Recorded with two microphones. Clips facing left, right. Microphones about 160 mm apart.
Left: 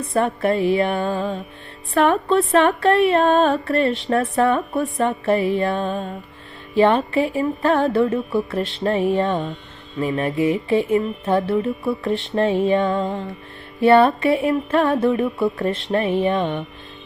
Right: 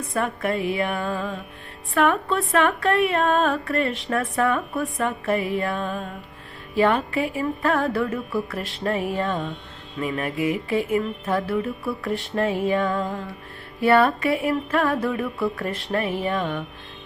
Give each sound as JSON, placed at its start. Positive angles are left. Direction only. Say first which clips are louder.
{"t": 0.0, "sound": "music", "louder": "left 5 dB", "side_deg": 30}
{"t": 1.9, "sound": "speech", "louder": "left 4 dB", "side_deg": 30}
{"t": 4.1, "sound": "music", "louder": "left 4 dB", "side_deg": 30}